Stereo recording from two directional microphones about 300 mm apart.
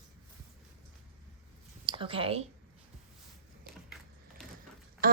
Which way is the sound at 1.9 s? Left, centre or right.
Centre.